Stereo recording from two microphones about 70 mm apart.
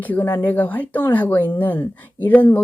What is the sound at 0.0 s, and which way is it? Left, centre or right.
Speech, left.